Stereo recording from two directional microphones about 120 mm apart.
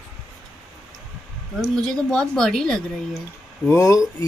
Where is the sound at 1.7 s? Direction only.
5° left (ahead or behind).